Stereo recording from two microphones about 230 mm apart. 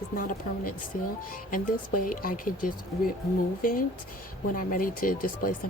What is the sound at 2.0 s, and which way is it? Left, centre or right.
Speech, left.